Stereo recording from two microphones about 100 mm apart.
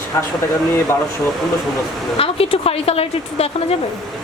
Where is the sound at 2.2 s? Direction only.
70° left (ahead or behind); by 3.5 s 90° left.